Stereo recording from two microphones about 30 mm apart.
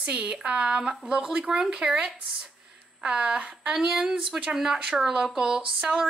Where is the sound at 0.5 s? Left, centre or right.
Right.